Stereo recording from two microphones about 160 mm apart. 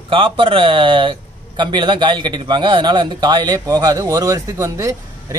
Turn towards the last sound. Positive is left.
turn(degrees=-20)  # may be behind; listen again after turning